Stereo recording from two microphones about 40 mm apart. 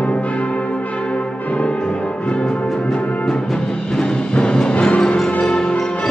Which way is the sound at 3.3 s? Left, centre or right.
Centre.